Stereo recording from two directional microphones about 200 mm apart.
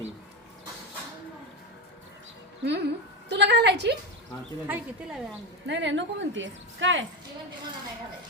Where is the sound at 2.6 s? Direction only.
60° right (ahead or behind).